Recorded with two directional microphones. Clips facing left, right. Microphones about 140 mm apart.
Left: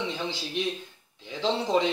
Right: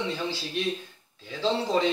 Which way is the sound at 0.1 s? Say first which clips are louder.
Right 1 dB; 15° left (ahead or behind).